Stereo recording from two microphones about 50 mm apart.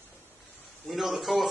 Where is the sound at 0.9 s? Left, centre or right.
Centre.